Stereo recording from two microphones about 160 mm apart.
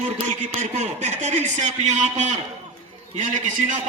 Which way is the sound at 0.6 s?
50° right (ahead or behind).